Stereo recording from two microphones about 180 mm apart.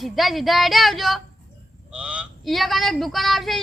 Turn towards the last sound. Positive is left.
turn(degrees=0)  # may be behind; listen again after turning